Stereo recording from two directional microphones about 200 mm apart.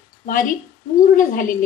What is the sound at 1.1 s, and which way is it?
Speech, 40° left (ahead or behind).